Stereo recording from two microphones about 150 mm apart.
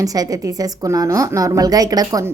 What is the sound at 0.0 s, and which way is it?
A woman's voice, 25° right (ahead or behind).